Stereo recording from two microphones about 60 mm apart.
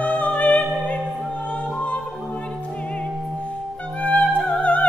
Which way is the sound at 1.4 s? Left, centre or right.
Left.